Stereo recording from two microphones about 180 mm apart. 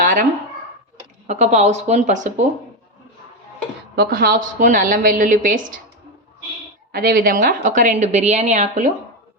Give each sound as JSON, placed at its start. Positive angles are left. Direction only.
{"t": 0.0, "sound": "a sound", "side_deg": -50}
{"t": 1.3, "sound": "a woman's voice", "side_deg": -40}
{"t": 3.9, "sound": "a woman's voice", "side_deg": -60}
{"t": 6.9, "sound": "speech", "side_deg": -60}
{"t": 7.3, "sound": "a woman's voice", "side_deg": -45}